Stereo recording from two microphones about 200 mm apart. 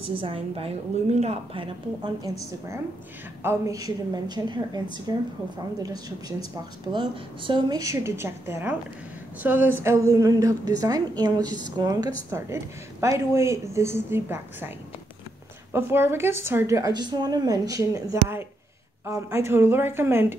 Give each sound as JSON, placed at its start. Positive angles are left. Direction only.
{"t": 0.0, "sound": "a woman's voice", "side_deg": -30}
{"t": 3.4, "sound": "a woman's voice", "side_deg": -15}
{"t": 15.7, "sound": "a woman's voice", "side_deg": -10}